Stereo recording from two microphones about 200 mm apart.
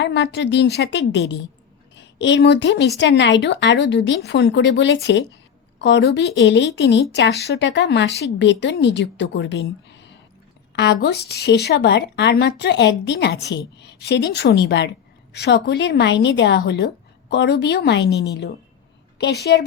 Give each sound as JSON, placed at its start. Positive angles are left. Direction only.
{"t": 0.0, "sound": "a woman's voice", "side_deg": 60}